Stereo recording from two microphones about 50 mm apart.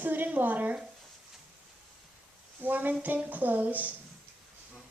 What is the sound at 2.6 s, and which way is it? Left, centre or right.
A woman's voice, right.